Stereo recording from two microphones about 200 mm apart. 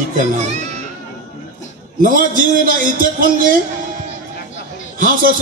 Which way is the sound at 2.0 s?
45° right (ahead or behind).